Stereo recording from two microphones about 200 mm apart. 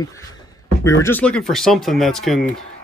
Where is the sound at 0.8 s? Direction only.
15° left (ahead or behind).